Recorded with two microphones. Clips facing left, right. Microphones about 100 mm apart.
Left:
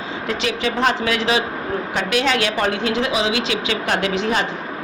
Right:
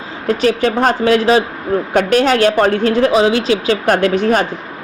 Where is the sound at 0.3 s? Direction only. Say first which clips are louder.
Right 9 dB; 45° right (ahead or behind).